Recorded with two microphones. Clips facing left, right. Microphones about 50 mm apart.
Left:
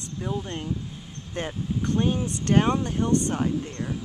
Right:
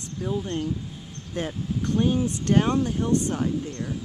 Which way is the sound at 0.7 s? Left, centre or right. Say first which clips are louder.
Even; centre.